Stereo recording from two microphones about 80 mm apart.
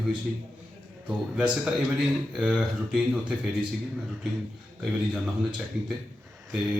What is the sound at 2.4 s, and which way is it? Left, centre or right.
Speech, centre.